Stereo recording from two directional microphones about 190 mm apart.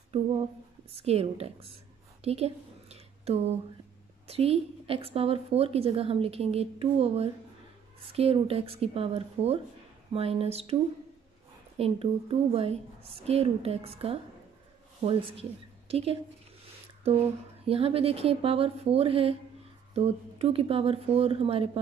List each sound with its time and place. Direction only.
0.9 s a woman's voice: 35° right (ahead or behind)
2.2 s a sound: 35° right (ahead or behind)
4.3 s a woman's voice: 30° right (ahead or behind)
11.7 s a woman's voice: 30° right (ahead or behind)